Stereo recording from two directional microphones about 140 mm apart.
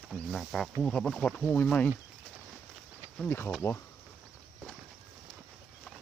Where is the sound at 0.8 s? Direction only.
5° left (ahead or behind).